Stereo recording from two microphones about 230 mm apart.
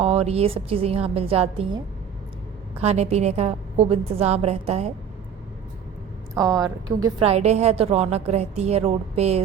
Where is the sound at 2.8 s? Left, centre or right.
Right.